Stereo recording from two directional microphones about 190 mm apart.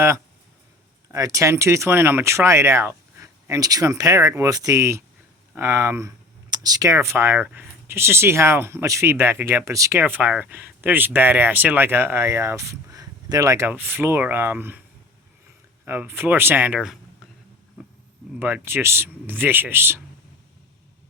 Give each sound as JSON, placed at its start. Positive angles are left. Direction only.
{"t": 1.1, "sound": "speech", "side_deg": -15}
{"t": 15.9, "sound": "speech", "side_deg": -10}
{"t": 18.3, "sound": "speech", "side_deg": -10}